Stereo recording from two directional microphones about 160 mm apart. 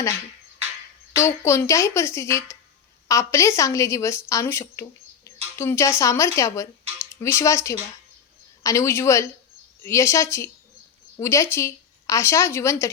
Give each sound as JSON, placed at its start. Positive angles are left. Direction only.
{"t": 1.1, "sound": "a woman's voice", "side_deg": 20}